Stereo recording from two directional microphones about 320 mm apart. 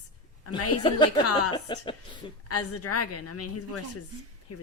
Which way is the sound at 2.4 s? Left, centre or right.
Left.